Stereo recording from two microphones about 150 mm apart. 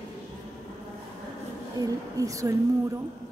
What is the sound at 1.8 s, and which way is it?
Speech, 20° right (ahead or behind).